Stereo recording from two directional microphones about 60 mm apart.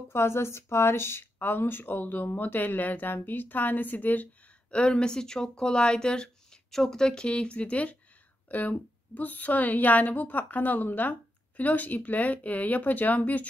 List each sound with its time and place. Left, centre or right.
0.1 s speech: left
4.6 s a woman's voice: centre